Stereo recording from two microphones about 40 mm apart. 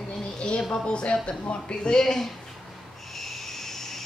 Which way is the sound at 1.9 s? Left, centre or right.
Centre.